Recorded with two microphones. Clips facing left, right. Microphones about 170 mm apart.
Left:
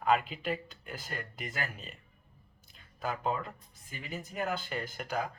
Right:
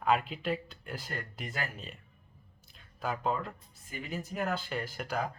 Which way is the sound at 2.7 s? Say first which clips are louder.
Right 1 dB; centre (ahead or behind).